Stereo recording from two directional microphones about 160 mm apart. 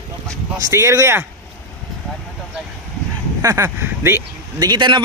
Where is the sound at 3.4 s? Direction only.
20° right (ahead or behind).